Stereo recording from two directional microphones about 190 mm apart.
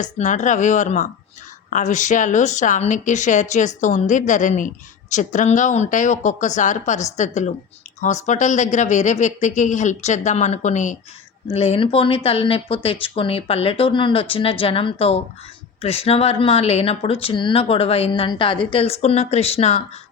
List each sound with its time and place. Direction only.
0.0 s speech: 40° left (ahead or behind)